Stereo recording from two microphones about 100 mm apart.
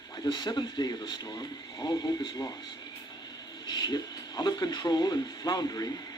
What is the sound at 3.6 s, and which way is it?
Speech, 50° left (ahead or behind).